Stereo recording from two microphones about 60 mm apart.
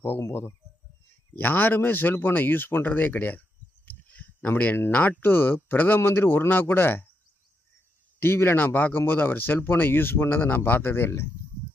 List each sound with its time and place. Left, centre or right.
0.2 s speech: left
1.4 s speech: left
3.8 s a sound: left
4.9 s speech: left
5.2 s speech: left
8.2 s speech: left